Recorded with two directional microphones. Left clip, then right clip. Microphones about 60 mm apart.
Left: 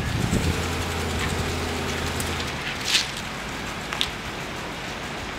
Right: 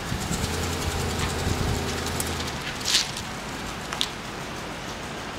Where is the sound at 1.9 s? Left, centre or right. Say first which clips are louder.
Left 2 dB; centre.